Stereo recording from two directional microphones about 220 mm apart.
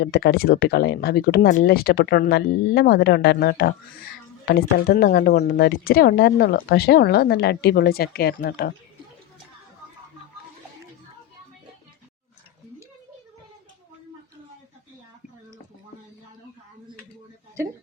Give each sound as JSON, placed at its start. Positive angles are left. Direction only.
{"t": 0.0, "sound": "speech", "side_deg": 45}